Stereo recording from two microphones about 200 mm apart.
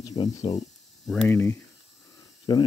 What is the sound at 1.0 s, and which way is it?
Speech, 5° left (ahead or behind).